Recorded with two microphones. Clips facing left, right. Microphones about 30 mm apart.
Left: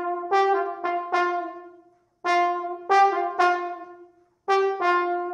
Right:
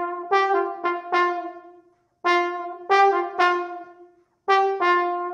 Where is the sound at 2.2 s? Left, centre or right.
Centre.